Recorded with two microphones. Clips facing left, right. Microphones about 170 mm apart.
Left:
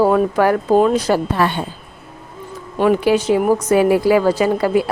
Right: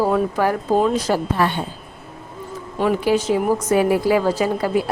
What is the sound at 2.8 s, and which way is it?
A woman's voice, 70° left (ahead or behind).